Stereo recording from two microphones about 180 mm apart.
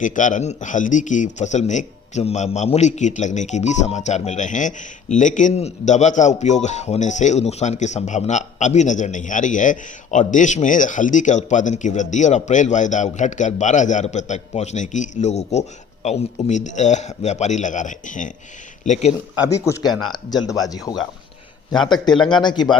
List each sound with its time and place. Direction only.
0.0 s speech: 45° left (ahead or behind)
19.5 s speech: 15° left (ahead or behind)